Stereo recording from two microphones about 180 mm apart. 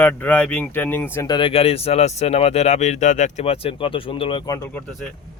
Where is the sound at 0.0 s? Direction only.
5° left (ahead or behind).